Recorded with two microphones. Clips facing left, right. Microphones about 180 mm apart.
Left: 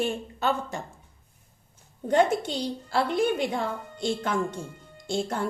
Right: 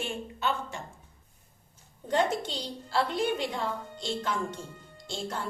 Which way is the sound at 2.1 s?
50° left (ahead or behind).